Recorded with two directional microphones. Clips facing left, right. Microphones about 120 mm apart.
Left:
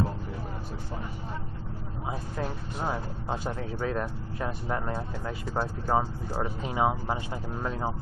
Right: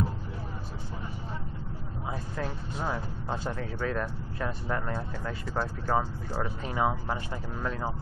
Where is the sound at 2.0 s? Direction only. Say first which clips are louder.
Left 1 dB; 15° left (ahead or behind).